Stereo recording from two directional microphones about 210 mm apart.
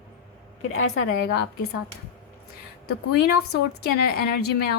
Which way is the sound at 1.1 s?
50° left (ahead or behind).